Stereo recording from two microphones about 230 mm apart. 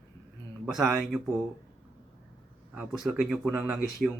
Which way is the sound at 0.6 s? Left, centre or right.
Centre.